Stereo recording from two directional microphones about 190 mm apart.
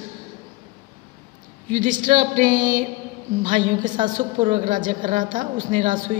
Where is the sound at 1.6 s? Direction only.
40° right (ahead or behind).